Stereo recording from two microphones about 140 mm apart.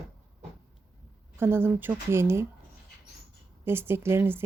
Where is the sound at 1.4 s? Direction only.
15° right (ahead or behind).